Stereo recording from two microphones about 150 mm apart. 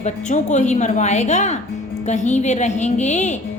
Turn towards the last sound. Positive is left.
turn(degrees=50)  # may be behind; listen again after turning